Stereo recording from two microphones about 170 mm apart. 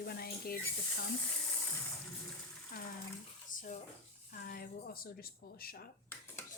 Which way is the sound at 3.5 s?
50° left (ahead or behind).